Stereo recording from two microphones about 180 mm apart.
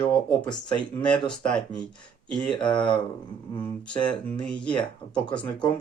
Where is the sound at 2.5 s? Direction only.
25° left (ahead or behind).